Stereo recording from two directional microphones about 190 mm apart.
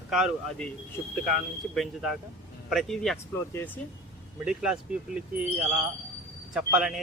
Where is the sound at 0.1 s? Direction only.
Centre (ahead or behind).